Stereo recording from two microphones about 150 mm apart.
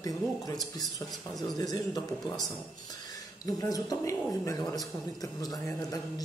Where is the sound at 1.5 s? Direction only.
25° left (ahead or behind).